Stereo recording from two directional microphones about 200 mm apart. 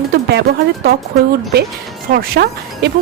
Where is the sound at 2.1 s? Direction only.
50° right (ahead or behind).